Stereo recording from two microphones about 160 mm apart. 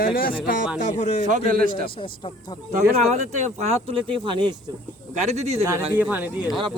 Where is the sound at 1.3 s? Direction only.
60° right (ahead or behind).